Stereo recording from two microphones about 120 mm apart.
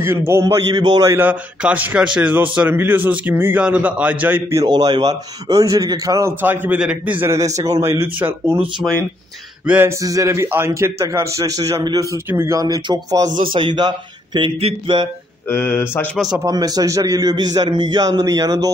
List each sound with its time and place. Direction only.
0.0 s a man's voice: 20° right (ahead or behind)
1.1 s a man's voice: 15° right (ahead or behind)
4.6 s a man's voice: 30° right (ahead or behind)
6.4 s a man's voice: 15° right (ahead or behind)
9.7 s a man's voice: 15° right (ahead or behind)
9.9 s a man's voice: 30° right (ahead or behind)
13.4 s a man's voice: 45° right (ahead or behind)
14.6 s a sound: 55° right (ahead or behind)
15.4 s speech: 20° left (ahead or behind)
16.4 s a man's voice: 30° right (ahead or behind)